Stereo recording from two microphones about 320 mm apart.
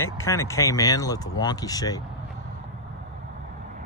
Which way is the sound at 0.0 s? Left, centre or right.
Centre.